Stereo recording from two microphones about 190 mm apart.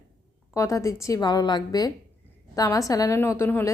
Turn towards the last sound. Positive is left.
turn(degrees=10)  # may be behind; listen again after turning